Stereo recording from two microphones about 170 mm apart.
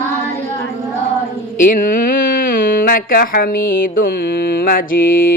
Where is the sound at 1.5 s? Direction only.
50° left (ahead or behind).